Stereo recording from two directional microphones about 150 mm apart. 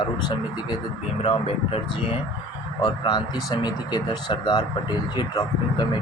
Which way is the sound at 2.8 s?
30° left (ahead or behind).